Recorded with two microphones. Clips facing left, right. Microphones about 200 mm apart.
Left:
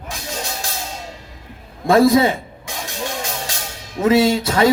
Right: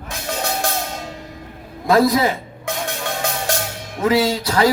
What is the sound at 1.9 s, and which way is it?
Speech, 25° left (ahead or behind).